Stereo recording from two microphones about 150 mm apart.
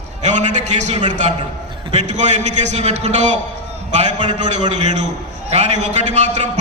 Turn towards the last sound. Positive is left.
turn(degrees=-50)  # may be behind; listen again after turning